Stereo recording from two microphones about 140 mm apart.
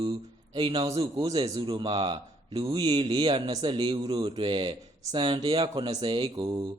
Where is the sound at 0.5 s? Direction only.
30° right (ahead or behind).